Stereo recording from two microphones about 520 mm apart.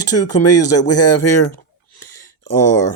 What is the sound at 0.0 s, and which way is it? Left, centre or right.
Speech, left.